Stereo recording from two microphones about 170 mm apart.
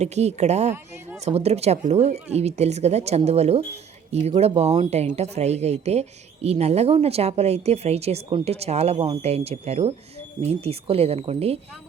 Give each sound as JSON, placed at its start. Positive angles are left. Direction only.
{"t": 0.0, "sound": "speech", "side_deg": -40}